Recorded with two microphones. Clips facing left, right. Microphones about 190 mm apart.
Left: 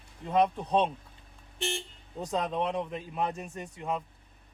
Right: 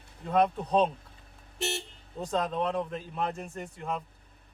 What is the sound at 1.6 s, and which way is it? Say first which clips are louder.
Speech: right 1 dB; 40° right (ahead or behind).